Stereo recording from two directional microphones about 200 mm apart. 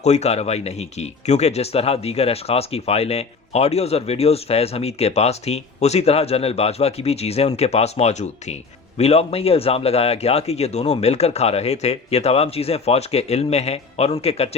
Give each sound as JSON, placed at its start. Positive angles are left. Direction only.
{"t": 0.0, "sound": "speech", "side_deg": 35}